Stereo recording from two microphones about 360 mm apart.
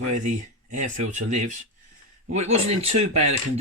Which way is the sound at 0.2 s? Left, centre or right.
Centre.